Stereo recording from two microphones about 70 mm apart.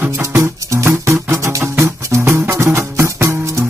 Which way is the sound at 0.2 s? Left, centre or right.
Right.